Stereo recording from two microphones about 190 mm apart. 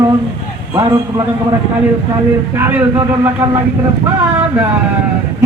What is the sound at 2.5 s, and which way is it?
Speech, 10° right (ahead or behind).